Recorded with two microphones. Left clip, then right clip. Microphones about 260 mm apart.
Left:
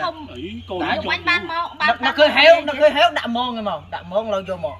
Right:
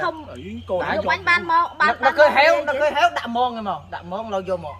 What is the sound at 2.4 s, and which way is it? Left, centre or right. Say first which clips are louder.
A man's voice: left 5 dB; centre.